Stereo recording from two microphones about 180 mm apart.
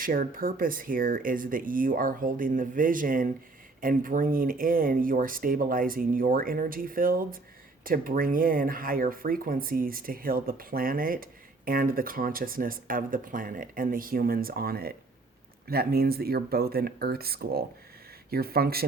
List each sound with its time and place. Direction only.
0.0 s speech: 55° right (ahead or behind)